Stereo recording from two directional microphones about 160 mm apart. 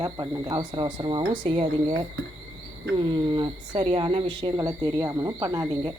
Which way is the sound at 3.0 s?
30° right (ahead or behind).